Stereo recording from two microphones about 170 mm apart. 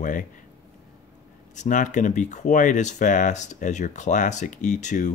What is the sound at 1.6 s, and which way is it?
Speech, 45° left (ahead or behind).